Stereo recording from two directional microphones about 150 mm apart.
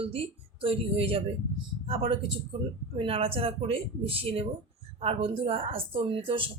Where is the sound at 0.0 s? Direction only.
40° right (ahead or behind).